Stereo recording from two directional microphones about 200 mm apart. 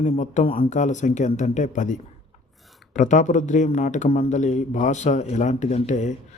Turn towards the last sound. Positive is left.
turn(degrees=35)  # may be behind; listen again after turning